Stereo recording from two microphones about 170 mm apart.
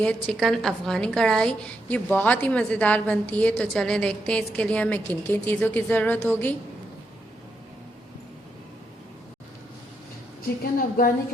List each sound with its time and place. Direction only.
0.0 s a woman's voice: 5° left (ahead or behind)
10.6 s a woman's voice: 55° left (ahead or behind)